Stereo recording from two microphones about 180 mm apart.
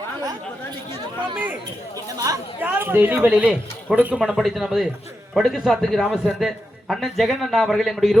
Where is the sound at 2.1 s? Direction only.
20° right (ahead or behind).